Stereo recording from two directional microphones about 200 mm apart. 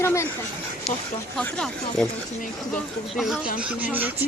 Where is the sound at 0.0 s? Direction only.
15° left (ahead or behind).